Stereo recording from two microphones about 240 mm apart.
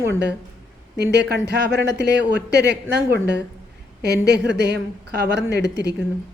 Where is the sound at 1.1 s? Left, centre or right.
Right.